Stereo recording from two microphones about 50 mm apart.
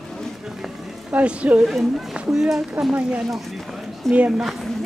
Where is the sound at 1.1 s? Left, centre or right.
Right.